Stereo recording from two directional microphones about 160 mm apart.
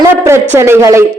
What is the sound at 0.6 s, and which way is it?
Speech, 15° right (ahead or behind).